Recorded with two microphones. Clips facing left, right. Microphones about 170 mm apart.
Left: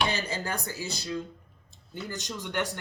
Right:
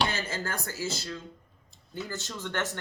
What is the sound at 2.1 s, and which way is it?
Speech, 15° left (ahead or behind).